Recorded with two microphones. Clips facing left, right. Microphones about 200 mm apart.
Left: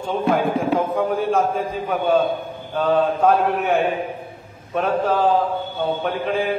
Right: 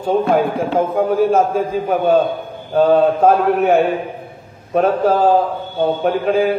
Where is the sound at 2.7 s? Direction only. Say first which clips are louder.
Right 6 dB; 40° right (ahead or behind).